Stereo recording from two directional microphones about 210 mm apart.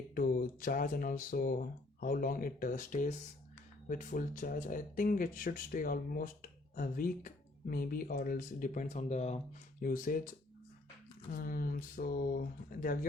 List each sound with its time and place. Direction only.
0.1 s speech: 40° left (ahead or behind)
11.3 s speech: 40° left (ahead or behind)